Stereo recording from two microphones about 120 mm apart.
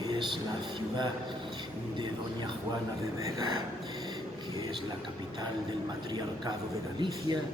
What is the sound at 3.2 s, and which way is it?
Speech, 30° right (ahead or behind).